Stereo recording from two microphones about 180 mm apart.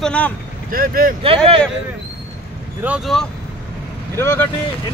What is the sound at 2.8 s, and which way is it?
Speech, 5° right (ahead or behind).